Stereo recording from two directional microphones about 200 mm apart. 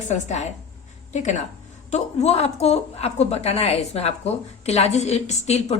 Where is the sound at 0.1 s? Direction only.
35° left (ahead or behind).